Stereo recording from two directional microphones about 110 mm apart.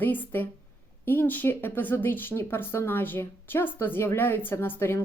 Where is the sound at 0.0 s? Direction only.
15° left (ahead or behind).